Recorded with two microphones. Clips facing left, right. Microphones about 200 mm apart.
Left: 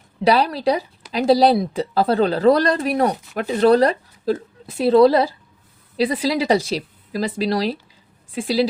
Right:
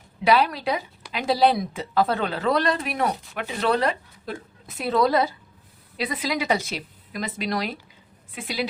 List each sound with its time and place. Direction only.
0.3 s speech: 35° left (ahead or behind)